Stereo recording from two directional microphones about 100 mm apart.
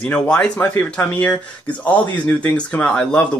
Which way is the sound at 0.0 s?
10° left (ahead or behind).